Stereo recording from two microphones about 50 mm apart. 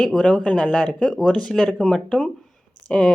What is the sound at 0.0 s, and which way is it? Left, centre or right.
Speech, centre.